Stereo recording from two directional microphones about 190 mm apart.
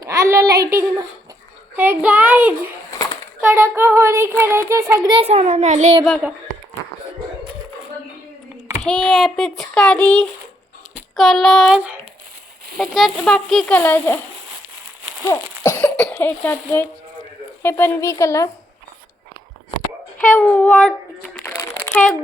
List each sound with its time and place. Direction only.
0.0 s a sound: 15° right (ahead or behind)
1.7 s child singing: 10° right (ahead or behind)
4.7 s a child's voice: 15° right (ahead or behind); by 6.0 s 40° right (ahead or behind)
8.8 s a child's voice: 5° left (ahead or behind)
15.6 s speech: 10° left (ahead or behind)
20.1 s speech: 10° left (ahead or behind)
21.3 s a sound: 10° left (ahead or behind)